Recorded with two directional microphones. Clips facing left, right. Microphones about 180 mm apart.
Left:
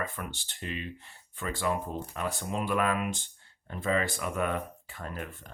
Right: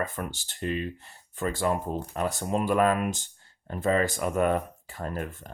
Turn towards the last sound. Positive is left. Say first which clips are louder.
# right 6 dB
turn(degrees=-40)  # may be behind; listen again after turning